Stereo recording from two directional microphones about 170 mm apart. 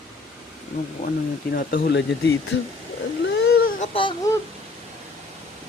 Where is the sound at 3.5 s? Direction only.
55° left (ahead or behind).